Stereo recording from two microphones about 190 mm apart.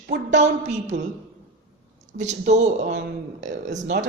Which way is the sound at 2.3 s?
35° right (ahead or behind).